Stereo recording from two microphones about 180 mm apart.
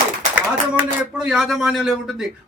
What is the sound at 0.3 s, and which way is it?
Speech, 5° right (ahead or behind).